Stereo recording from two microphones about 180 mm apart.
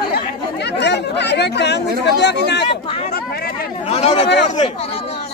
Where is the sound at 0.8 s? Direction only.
70° left (ahead or behind).